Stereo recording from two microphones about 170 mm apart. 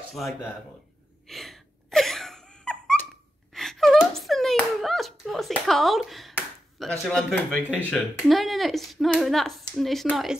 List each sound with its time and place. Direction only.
0.1 s speech: centre (ahead or behind)
1.2 s a sound: centre (ahead or behind)
6.3 s speech: 5° left (ahead or behind)
7.6 s speech: 10° right (ahead or behind)